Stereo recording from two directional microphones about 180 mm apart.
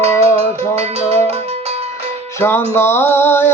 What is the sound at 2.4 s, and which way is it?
Music, 10° left (ahead or behind).